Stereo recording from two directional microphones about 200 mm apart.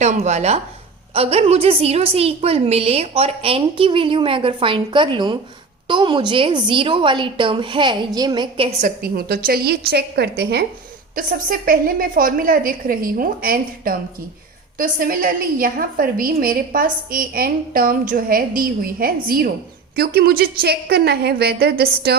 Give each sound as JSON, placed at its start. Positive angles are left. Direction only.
{"t": 0.0, "sound": "a woman's voice", "side_deg": -35}
{"t": 9.0, "sound": "a woman's voice", "side_deg": -50}
{"t": 11.1, "sound": "a woman's voice", "side_deg": -45}